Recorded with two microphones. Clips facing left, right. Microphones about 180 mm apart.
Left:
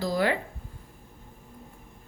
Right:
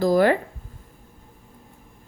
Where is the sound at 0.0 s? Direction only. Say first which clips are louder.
Right 8 dB; 50° right (ahead or behind).